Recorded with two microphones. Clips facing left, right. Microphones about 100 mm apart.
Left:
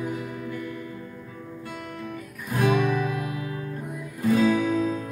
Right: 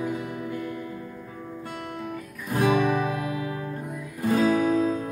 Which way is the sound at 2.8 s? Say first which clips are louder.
Right 1 dB; 40° right (ahead or behind).